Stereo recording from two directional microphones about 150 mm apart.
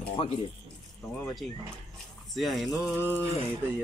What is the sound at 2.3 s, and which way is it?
Speech, centre (ahead or behind).